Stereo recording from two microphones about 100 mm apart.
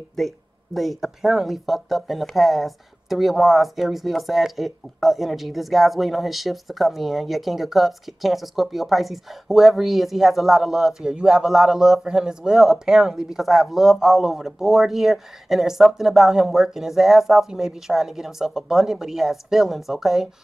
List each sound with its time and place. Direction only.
0.2 s speech: 5° left (ahead or behind)